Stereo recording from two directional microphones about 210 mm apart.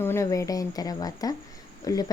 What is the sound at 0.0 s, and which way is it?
Speech, 10° left (ahead or behind).